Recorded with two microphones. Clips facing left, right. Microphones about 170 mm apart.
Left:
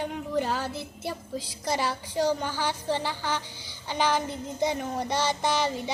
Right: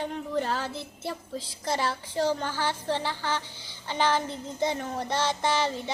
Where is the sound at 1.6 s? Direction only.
Centre (ahead or behind).